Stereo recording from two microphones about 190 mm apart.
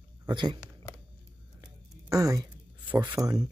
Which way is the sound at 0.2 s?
25° right (ahead or behind).